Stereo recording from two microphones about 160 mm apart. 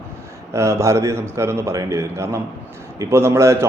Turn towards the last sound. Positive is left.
turn(degrees=-15)  # may be behind; listen again after turning